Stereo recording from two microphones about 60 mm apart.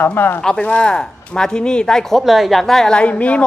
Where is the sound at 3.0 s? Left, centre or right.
Left.